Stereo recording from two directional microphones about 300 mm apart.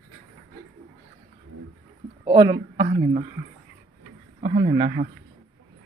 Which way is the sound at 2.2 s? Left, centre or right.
Centre.